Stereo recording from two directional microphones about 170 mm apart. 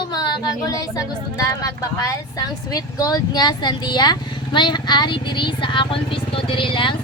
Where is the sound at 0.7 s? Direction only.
20° left (ahead or behind).